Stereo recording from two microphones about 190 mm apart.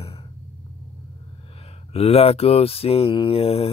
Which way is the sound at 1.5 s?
30° left (ahead or behind).